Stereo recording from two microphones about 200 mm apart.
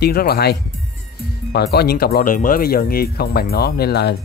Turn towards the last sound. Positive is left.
turn(degrees=55)  # may be behind; listen again after turning